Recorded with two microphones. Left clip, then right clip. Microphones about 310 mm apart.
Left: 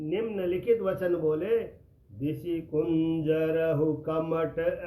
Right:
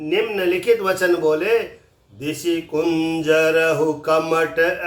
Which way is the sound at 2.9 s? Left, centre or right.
Centre.